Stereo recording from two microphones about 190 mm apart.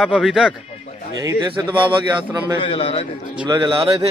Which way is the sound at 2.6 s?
25° left (ahead or behind).